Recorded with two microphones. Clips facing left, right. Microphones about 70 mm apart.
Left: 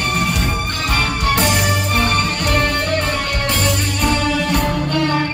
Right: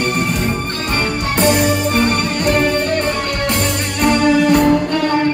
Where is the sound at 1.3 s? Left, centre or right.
Centre.